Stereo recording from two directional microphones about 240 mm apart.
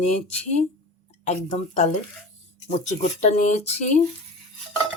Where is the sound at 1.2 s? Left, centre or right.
Left.